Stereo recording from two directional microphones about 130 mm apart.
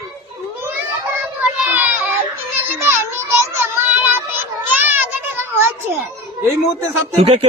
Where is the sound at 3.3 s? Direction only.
20° right (ahead or behind).